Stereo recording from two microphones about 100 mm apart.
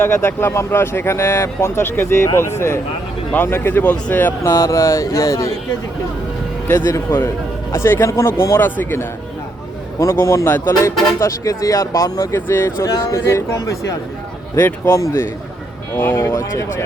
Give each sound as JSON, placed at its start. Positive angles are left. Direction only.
{"t": 0.0, "sound": "speech", "side_deg": 25}
{"t": 4.4, "sound": "speech", "side_deg": 30}
{"t": 6.7, "sound": "speech", "side_deg": 25}